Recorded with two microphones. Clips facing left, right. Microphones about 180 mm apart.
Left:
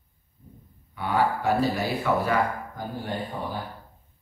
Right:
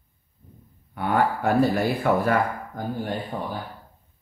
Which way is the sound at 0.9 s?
50° right (ahead or behind).